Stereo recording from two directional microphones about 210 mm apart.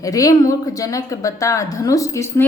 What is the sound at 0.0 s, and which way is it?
Speech, 15° left (ahead or behind).